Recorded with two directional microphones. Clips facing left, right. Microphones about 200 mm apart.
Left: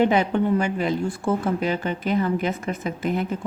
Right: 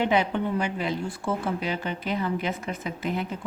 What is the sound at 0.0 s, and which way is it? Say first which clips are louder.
A woman's voice: left 5 dB; 45° left (ahead or behind).